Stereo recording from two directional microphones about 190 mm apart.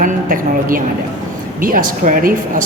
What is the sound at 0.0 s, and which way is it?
A woman's voice, 45° right (ahead or behind).